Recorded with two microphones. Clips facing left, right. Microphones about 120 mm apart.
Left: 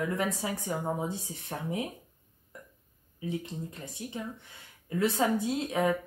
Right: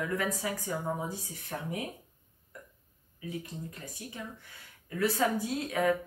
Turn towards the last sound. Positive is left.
turn(degrees=25)  # may be behind; listen again after turning